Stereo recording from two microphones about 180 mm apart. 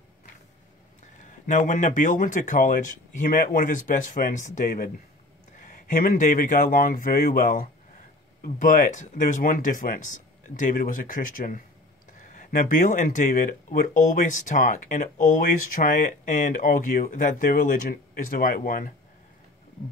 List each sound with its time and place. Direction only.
1.0 s speech: 45° left (ahead or behind)